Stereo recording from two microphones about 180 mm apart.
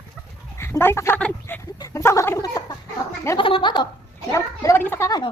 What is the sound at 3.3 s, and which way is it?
A woman's voice, 30° left (ahead or behind).